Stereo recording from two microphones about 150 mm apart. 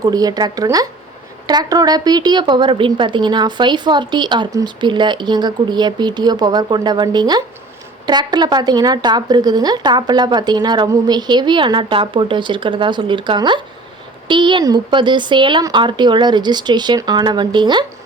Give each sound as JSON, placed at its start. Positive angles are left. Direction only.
{"t": 0.0, "sound": "a woman's voice", "side_deg": -25}